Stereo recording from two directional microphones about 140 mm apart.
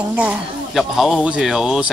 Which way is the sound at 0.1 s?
10° right (ahead or behind).